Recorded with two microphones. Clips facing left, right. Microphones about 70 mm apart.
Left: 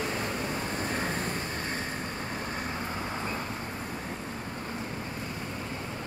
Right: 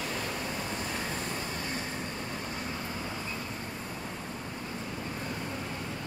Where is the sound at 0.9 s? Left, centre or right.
Left.